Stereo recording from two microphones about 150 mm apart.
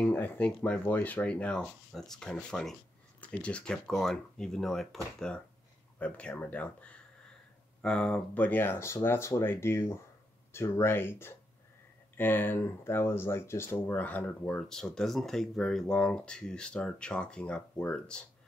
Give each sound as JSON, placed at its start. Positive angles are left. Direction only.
{"t": 0.0, "sound": "speech", "side_deg": 10}